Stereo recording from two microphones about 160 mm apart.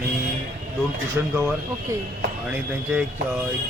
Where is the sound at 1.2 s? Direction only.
15° right (ahead or behind).